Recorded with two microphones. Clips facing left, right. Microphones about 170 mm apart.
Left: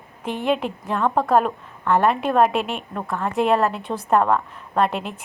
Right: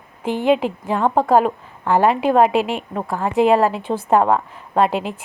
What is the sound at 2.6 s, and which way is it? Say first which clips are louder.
Speech: right 5 dB; 90° right.